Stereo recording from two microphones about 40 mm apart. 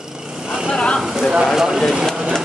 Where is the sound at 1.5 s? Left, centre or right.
Centre.